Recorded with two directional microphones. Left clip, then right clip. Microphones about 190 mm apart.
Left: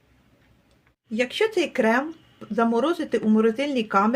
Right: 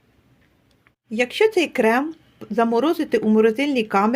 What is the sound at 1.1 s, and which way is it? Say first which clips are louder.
Speech: right 5 dB; 30° right (ahead or behind).